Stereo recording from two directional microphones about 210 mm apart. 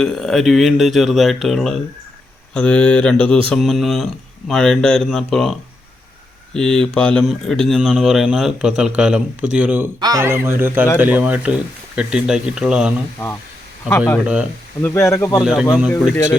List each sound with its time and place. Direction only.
0.0 s speech: centre (ahead or behind)
14.8 s speech: 10° left (ahead or behind)
15.4 s speech: centre (ahead or behind)